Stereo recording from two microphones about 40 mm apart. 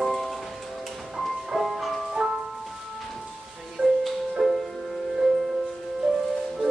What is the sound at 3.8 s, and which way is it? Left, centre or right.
Music, right.